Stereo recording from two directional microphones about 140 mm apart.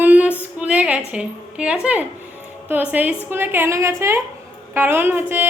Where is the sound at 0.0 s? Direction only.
10° right (ahead or behind).